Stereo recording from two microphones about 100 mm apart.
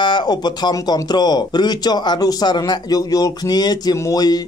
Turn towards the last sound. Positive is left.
turn(degrees=40)  # may be behind; listen again after turning